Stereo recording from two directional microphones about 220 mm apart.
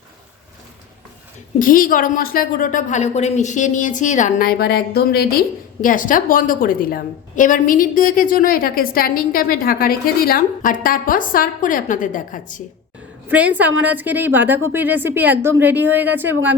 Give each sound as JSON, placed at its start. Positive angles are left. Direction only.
{"t": 1.5, "sound": "a woman's voice", "side_deg": 40}
{"t": 13.2, "sound": "a woman's voice", "side_deg": -5}